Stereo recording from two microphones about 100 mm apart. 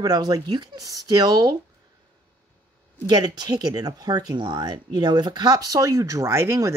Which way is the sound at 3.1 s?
45° right (ahead or behind).